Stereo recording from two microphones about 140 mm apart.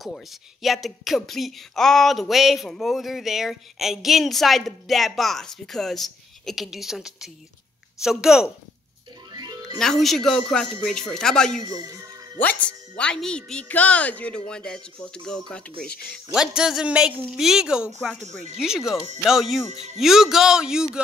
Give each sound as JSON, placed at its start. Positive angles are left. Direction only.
{"t": 0.0, "sound": "speech", "side_deg": 0}
{"t": 9.3, "sound": "music", "side_deg": -30}
{"t": 9.8, "sound": "a woman's voice", "side_deg": 0}
{"t": 19.7, "sound": "speech", "side_deg": -55}
{"t": 20.0, "sound": "speech", "side_deg": 0}